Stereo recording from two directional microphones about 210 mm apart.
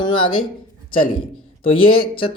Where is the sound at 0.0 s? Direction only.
25° left (ahead or behind).